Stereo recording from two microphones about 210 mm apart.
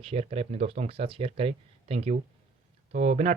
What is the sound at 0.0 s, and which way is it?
Speech, 30° right (ahead or behind).